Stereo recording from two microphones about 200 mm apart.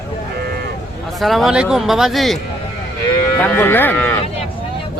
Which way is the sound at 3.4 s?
10° left (ahead or behind).